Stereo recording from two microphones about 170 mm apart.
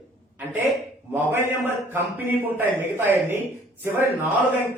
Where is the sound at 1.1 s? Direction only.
10° right (ahead or behind).